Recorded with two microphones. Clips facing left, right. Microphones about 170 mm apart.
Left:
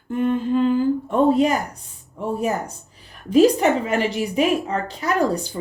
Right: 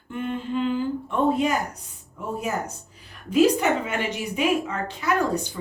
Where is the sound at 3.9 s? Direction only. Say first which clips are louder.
Left 6 dB; 35° left (ahead or behind).